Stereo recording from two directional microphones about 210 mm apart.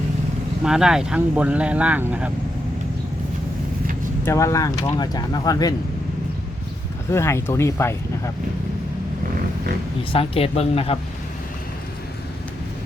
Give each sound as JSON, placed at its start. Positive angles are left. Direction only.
{"t": 0.6, "sound": "speech", "side_deg": -5}
{"t": 4.3, "sound": "speech", "side_deg": 15}
{"t": 7.1, "sound": "speech", "side_deg": 10}
{"t": 10.1, "sound": "speech", "side_deg": 25}